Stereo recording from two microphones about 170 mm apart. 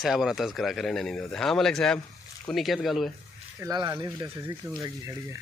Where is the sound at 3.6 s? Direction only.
20° right (ahead or behind).